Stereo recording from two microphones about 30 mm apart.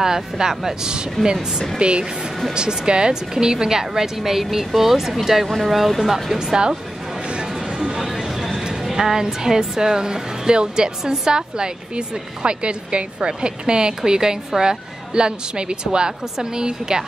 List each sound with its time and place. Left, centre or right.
0.0 s a woman's voice: centre
1.8 s a woman's voice: right; by 6.4 s centre
6.4 s speech: right
8.0 s a sound: centre
8.9 s speech: centre